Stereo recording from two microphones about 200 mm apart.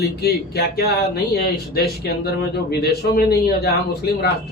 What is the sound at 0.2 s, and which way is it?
Speech, 50° left (ahead or behind).